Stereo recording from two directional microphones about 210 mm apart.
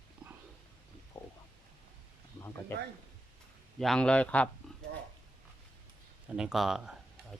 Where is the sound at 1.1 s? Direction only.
15° left (ahead or behind).